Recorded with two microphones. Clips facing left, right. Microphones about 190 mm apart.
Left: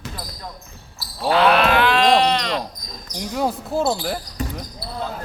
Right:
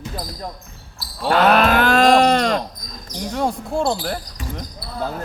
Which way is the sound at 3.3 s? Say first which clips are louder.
Even; 5° left (ahead or behind).